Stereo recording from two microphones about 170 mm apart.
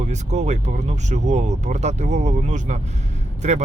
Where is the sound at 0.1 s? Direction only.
45° right (ahead or behind).